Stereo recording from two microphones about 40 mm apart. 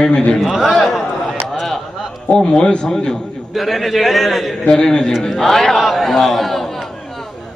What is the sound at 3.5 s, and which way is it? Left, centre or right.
A man's voice, centre.